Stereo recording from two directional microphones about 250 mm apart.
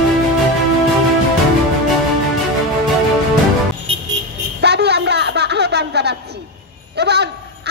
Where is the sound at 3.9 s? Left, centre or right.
Right.